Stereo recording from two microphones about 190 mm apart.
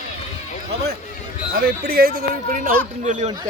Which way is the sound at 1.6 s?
55° right (ahead or behind).